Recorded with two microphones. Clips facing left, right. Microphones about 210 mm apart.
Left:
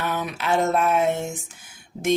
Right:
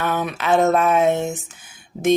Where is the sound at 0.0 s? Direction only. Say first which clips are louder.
Right 4 dB; 50° right (ahead or behind); by 1.3 s 65° right (ahead or behind).